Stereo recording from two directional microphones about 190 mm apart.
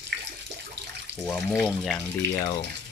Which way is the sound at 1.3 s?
5° left (ahead or behind).